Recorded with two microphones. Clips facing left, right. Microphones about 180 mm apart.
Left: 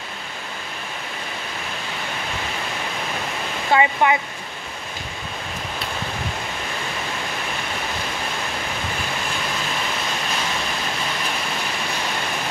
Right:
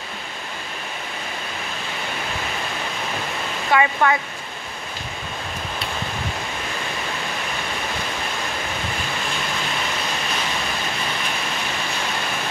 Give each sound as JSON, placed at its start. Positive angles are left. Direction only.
{"t": 3.7, "sound": "speech", "side_deg": 20}